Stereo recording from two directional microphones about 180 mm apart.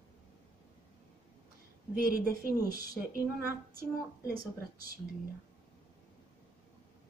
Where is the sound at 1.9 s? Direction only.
55° right (ahead or behind).